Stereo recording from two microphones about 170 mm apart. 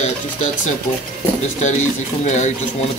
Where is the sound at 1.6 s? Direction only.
45° left (ahead or behind).